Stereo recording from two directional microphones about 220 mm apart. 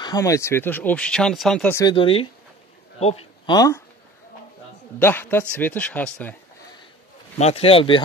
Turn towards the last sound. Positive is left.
turn(degrees=25)  # may be behind; listen again after turning